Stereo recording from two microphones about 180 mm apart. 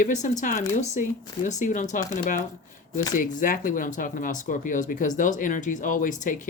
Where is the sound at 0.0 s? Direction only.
40° left (ahead or behind).